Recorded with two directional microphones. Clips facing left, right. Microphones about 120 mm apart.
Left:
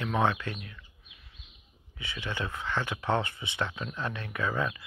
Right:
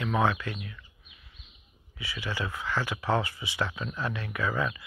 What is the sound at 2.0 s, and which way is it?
Speech, 25° left (ahead or behind).